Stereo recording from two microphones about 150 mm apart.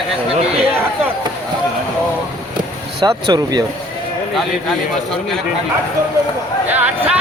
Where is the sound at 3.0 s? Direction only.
25° right (ahead or behind).